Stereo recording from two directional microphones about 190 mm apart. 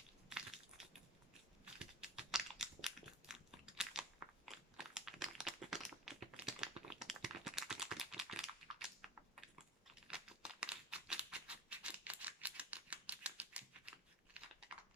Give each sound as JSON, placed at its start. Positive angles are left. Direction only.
{"t": 0.3, "sound": "crushing", "side_deg": 0}
{"t": 1.8, "sound": "biting", "side_deg": -5}
{"t": 4.4, "sound": "a sound", "side_deg": 0}
{"t": 9.8, "sound": "computer keyboard", "side_deg": -5}